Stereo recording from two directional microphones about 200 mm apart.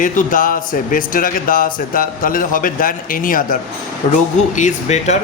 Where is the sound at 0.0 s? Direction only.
40° left (ahead or behind).